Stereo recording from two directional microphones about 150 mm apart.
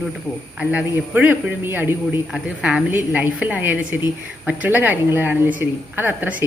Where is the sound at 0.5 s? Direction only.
10° right (ahead or behind).